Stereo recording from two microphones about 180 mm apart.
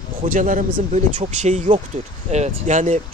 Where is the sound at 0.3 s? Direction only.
45° right (ahead or behind).